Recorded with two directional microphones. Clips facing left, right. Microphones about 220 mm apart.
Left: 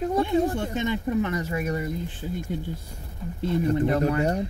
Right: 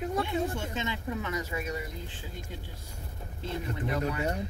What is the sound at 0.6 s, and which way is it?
Speech, 55° left (ahead or behind).